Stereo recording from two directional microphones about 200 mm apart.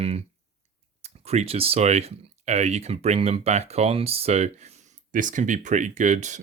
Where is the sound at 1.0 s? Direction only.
30° right (ahead or behind).